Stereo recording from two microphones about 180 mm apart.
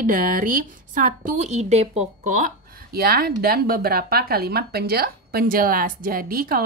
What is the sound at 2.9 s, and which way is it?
Speech, 60° right (ahead or behind).